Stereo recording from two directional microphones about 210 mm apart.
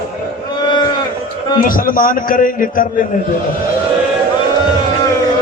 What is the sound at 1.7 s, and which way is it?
A man's voice, 40° left (ahead or behind).